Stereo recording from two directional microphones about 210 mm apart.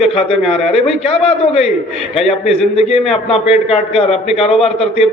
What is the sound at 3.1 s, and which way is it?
A man's voice, 30° left (ahead or behind).